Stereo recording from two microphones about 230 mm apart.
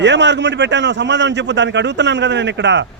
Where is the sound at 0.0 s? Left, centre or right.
Right.